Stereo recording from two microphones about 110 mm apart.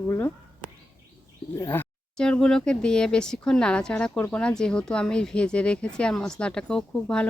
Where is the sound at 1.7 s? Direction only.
20° left (ahead or behind).